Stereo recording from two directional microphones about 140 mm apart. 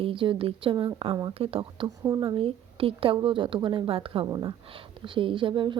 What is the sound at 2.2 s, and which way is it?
Speech, 40° right (ahead or behind).